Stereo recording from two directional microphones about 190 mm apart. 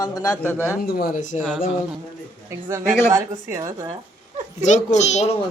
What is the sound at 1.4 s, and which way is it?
Speech, 5° right (ahead or behind).